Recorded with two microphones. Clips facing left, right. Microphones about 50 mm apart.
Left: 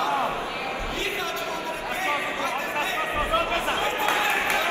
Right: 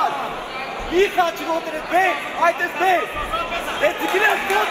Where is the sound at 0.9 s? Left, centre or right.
Right.